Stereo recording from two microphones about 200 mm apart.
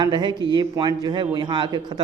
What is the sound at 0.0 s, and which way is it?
Speech, 20° right (ahead or behind).